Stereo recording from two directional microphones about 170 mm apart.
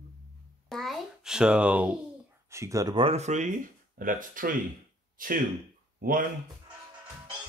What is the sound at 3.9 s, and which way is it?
Speech, 55° right (ahead or behind).